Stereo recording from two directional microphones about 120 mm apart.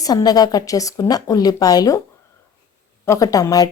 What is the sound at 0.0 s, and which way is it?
A woman's voice, 30° left (ahead or behind).